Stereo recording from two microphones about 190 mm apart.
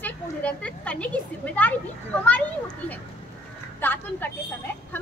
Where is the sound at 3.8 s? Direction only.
10° left (ahead or behind).